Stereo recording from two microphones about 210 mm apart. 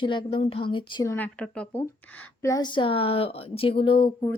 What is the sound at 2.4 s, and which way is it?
Speech, 15° left (ahead or behind).